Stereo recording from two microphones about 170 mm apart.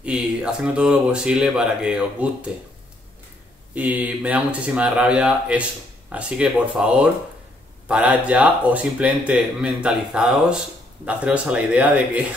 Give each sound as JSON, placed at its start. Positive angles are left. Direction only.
{"t": 0.0, "sound": "speech", "side_deg": -5}
{"t": 3.7, "sound": "speech", "side_deg": -10}